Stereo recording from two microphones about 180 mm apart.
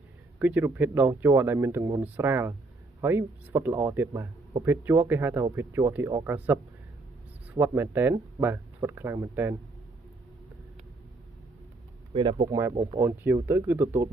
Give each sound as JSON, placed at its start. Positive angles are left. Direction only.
{"t": 0.4, "sound": "speech", "side_deg": -10}
{"t": 12.1, "sound": "speech", "side_deg": -30}